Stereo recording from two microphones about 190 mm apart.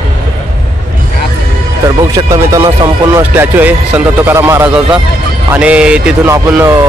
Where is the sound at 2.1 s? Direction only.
15° right (ahead or behind).